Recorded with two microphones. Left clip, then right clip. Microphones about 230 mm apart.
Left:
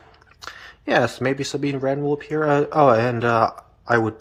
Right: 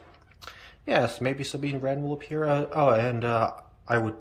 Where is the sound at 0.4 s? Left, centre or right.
Centre.